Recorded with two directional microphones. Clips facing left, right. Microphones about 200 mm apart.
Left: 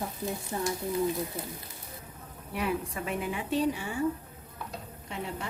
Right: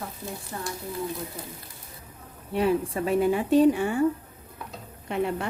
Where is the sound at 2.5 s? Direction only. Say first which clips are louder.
Right 8 dB; 30° right (ahead or behind); by 4.0 s 60° right (ahead or behind).